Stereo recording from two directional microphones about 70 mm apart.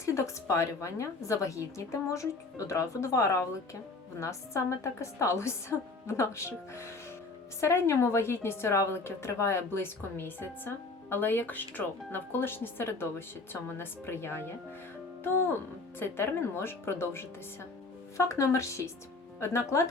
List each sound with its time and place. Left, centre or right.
0.0 s a woman's voice: left
16.0 s a woman's voice: left